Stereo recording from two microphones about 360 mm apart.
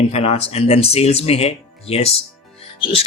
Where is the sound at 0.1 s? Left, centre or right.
Centre.